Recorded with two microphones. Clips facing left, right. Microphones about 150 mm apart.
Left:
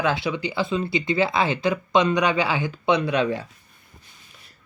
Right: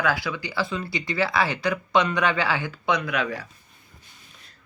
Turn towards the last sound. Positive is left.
turn(degrees=30)  # may be behind; listen again after turning